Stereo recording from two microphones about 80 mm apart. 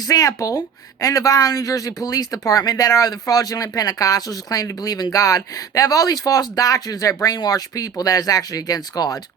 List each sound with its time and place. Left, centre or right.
0.1 s speech: left